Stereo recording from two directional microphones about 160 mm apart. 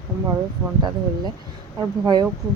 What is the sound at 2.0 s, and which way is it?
Speech, 25° right (ahead or behind).